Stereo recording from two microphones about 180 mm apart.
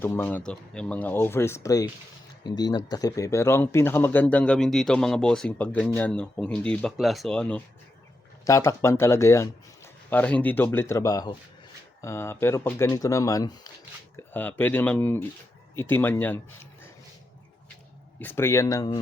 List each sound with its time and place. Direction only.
0.0 s speech: 10° left (ahead or behind)
8.4 s speech: 15° left (ahead or behind)
18.2 s speech: 10° left (ahead or behind)